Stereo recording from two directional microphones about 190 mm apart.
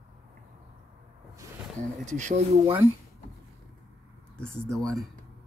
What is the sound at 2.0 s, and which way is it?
Speech, 40° right (ahead or behind).